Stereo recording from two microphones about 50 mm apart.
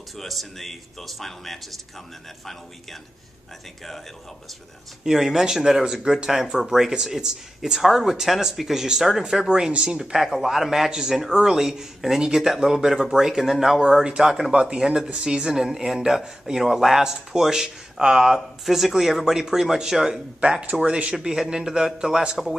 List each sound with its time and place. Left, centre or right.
0.1 s speech: centre
5.0 s speech: centre
15.4 s speech: centre